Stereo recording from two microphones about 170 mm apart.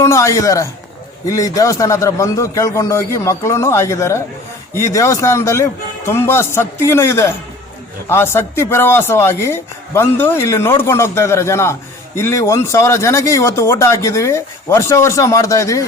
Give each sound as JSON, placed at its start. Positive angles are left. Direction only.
{"t": 0.0, "sound": "a man's voice", "side_deg": 15}